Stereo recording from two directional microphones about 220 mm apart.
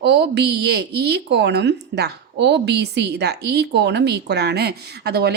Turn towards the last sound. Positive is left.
turn(degrees=-45)  # may be behind; listen again after turning